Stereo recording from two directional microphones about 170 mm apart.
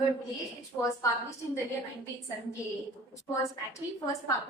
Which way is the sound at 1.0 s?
15° left (ahead or behind).